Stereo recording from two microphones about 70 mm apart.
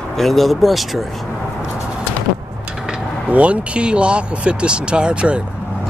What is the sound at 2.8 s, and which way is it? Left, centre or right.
Speech, centre.